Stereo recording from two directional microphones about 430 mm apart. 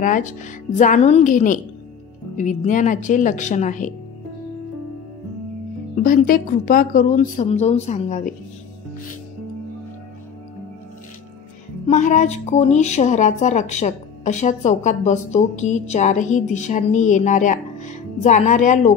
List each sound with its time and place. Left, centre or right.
0.0 s a woman's voice: centre
6.0 s a woman's voice: centre
11.9 s a woman's voice: centre